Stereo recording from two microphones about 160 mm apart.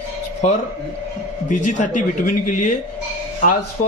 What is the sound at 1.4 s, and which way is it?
Speech, 50° left (ahead or behind).